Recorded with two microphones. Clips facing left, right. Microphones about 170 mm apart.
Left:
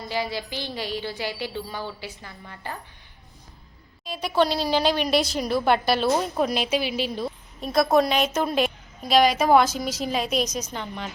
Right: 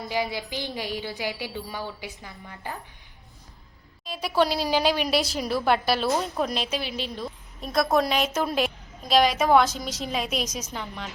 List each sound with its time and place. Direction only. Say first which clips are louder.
0.1 s a woman's voice: even; 15° right (ahead or behind)
4.0 s a woman's voice: left 1 dB; 5° right (ahead or behind)